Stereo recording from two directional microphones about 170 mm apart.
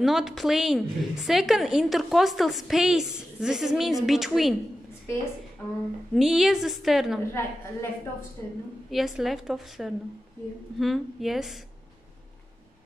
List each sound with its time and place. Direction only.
0.0 s a woman's voice: centre (ahead or behind)
6.1 s a woman's voice: centre (ahead or behind)
7.3 s a woman's voice: 15° left (ahead or behind)
8.9 s a woman's voice: centre (ahead or behind)